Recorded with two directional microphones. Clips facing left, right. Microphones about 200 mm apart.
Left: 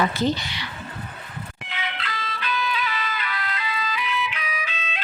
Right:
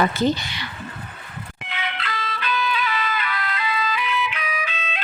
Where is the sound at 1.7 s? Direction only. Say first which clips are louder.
Right 3 dB; 60° right (ahead or behind).